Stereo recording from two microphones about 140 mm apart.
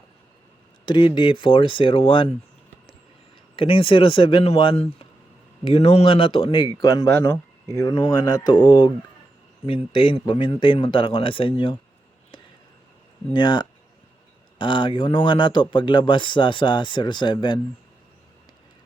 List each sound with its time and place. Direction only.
0.9 s speech: 35° left (ahead or behind)
3.5 s speech: 40° left (ahead or behind)
13.3 s speech: 35° left (ahead or behind)